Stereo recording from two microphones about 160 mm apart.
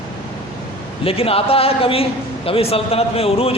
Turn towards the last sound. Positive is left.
turn(degrees=35)  # may be behind; listen again after turning